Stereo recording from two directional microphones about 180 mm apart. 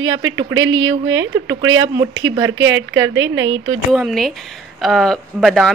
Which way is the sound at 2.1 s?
90° right.